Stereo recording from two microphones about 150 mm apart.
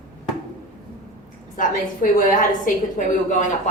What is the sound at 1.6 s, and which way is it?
A woman's voice, 60° left (ahead or behind).